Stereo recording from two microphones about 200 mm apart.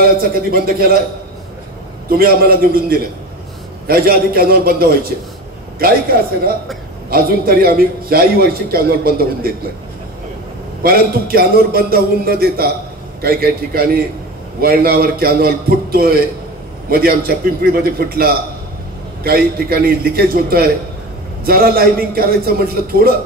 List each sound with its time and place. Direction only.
0.0 s a man's voice: 50° right (ahead or behind)
2.0 s a man's voice: 50° right (ahead or behind)
10.8 s a man's voice: 50° right (ahead or behind)